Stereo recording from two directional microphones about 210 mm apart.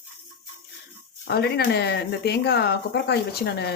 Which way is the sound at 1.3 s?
50° left (ahead or behind).